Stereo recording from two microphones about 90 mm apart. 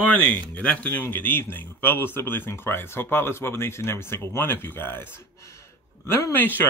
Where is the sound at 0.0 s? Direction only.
15° left (ahead or behind).